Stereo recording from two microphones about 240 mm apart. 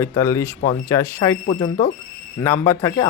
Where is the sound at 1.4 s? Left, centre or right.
Left.